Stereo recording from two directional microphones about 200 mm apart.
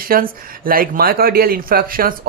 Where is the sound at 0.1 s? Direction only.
45° right (ahead or behind).